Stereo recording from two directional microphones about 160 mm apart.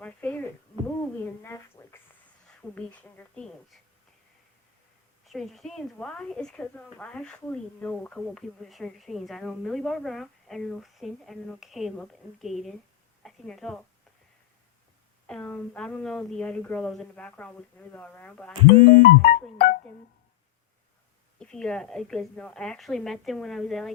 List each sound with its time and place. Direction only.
0.0 s a sound: 10° left (ahead or behind)
5.2 s a woman's voice: centre (ahead or behind)
13.2 s a sound: 5° left (ahead or behind)
15.3 s a woman's voice: 5° left (ahead or behind)
19.2 s music: 60° left (ahead or behind)
21.3 s a woman's voice: 5° left (ahead or behind)